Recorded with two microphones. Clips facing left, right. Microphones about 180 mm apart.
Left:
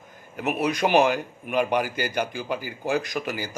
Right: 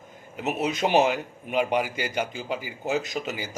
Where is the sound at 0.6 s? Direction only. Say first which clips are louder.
Left 2 dB; 25° right (ahead or behind).